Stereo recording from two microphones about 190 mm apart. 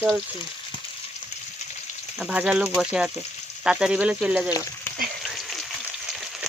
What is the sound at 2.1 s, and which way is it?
Speech, 5° right (ahead or behind).